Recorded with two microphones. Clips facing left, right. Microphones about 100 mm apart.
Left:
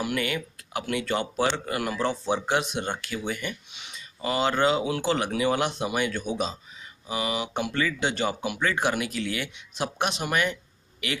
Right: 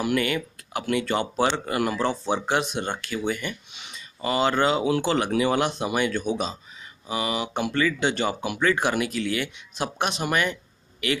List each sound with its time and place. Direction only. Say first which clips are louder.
0.0 s speech: right 4 dB; 5° left (ahead or behind)
1.1 s speech: right 1 dB; 20° right (ahead or behind)
1.8 s speech: right 4 dB; 10° right (ahead or behind)
2.4 s speech: right 1 dB; 5° left (ahead or behind)